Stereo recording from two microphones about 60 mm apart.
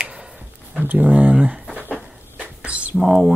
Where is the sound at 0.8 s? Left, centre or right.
Right.